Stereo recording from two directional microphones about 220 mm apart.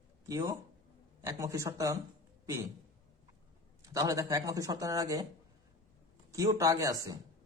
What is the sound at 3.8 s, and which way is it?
Speech, 15° right (ahead or behind).